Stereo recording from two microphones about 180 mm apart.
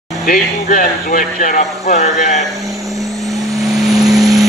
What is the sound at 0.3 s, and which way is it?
Speech, 50° left (ahead or behind).